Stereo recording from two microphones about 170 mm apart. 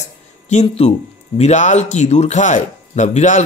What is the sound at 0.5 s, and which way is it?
Speech, 40° left (ahead or behind).